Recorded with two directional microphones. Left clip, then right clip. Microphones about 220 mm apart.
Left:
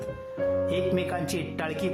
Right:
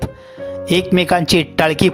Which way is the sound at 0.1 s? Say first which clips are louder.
Even; centre (ahead or behind).